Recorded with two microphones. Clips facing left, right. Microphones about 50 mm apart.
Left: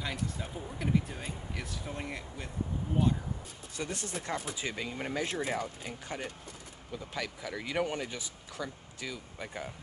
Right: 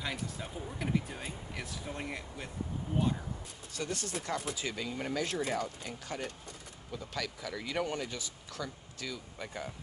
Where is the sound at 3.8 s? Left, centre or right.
Left.